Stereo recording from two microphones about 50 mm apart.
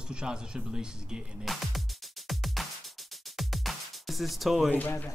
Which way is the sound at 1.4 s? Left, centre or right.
Centre.